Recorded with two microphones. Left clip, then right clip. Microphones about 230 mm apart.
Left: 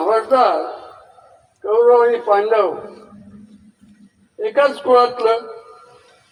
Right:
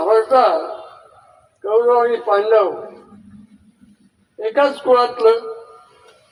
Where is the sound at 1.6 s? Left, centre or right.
Right.